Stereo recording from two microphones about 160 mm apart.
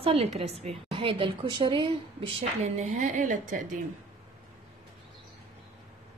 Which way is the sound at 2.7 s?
45° right (ahead or behind).